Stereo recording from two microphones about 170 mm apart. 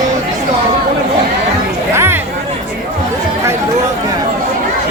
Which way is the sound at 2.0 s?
15° right (ahead or behind).